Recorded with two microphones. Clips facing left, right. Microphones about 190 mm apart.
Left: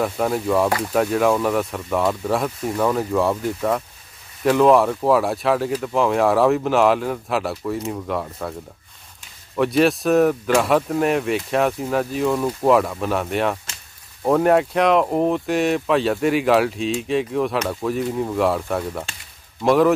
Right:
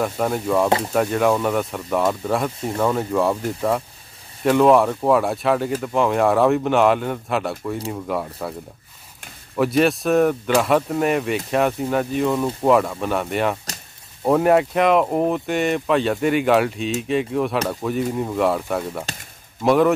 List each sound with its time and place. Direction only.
0.0 s speech: centre (ahead or behind)
0.7 s speech: 25° right (ahead or behind)
0.9 s speech: centre (ahead or behind)
9.6 s speech: centre (ahead or behind)